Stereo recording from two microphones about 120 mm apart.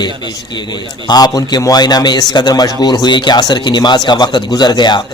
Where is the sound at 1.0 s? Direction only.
35° left (ahead or behind).